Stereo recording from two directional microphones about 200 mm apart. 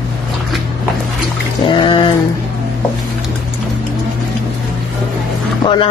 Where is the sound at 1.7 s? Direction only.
25° left (ahead or behind).